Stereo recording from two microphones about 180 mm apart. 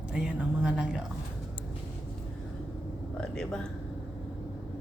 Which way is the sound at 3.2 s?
5° left (ahead or behind).